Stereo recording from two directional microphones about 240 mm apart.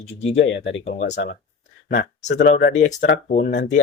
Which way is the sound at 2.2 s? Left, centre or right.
Left.